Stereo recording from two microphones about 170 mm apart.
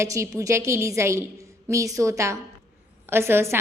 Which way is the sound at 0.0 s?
15° right (ahead or behind).